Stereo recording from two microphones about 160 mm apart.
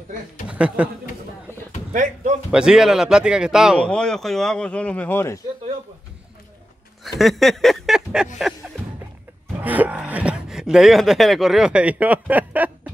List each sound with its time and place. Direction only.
0.5 s speech: 5° right (ahead or behind)
1.9 s a sound: 50° right (ahead or behind)
2.5 s a man's voice: 5° right (ahead or behind); by 5.4 s 15° left (ahead or behind)
7.1 s speech: centre (ahead or behind)
9.6 s speech: 10° right (ahead or behind)